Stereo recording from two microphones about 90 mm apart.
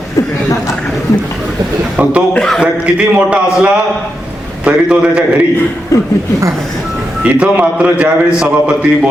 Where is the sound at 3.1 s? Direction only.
15° right (ahead or behind).